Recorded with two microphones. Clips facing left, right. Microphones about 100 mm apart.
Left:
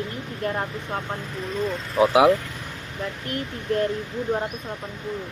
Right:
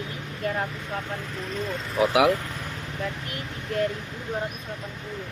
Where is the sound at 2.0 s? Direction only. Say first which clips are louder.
Left 4 dB; 25° left (ahead or behind).